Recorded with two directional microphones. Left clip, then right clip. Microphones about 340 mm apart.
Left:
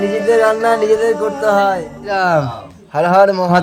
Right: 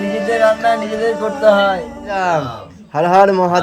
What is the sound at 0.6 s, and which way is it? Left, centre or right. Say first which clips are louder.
Speech: left 3 dB; centre.